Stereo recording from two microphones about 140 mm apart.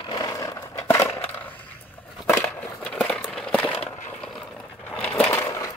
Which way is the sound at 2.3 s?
20° left (ahead or behind).